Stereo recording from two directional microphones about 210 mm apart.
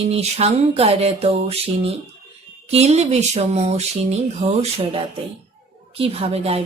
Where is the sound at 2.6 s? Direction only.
30° right (ahead or behind).